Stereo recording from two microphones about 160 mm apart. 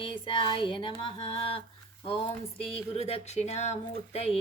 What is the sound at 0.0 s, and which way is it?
Speech, 30° left (ahead or behind).